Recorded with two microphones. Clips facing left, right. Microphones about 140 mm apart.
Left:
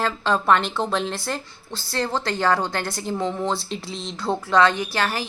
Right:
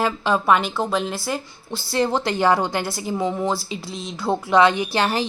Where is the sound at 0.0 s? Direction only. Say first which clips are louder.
Right 2 dB; 10° right (ahead or behind).